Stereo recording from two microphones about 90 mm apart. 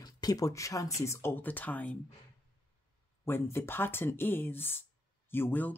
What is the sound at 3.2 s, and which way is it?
Speech, 25° left (ahead or behind).